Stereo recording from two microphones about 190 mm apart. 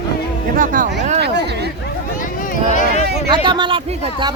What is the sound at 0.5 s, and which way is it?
Speech, 45° right (ahead or behind).